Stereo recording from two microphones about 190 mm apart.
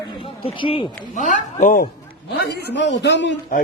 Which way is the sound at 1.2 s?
40° left (ahead or behind).